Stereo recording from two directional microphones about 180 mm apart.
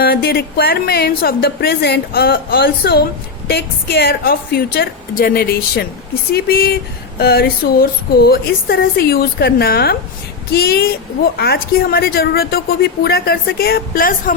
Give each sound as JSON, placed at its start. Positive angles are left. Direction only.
{"t": 0.0, "sound": "a woman's voice", "side_deg": 60}